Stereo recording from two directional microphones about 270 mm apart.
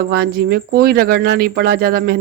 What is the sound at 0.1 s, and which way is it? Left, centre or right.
Speech, right.